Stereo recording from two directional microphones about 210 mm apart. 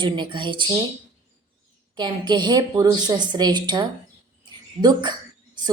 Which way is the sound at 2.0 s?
20° right (ahead or behind).